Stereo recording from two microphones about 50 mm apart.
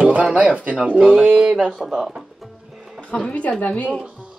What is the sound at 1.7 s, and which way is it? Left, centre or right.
Speech, centre.